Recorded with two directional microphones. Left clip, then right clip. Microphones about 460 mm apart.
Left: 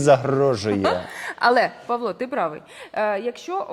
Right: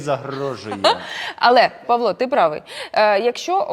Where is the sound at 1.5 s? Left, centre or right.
Right.